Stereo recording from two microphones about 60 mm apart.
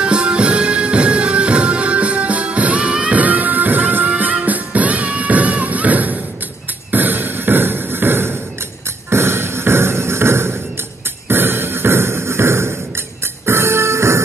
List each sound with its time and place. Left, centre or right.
0.0 s music: centre
6.9 s beatboxing: right
9.1 s music: right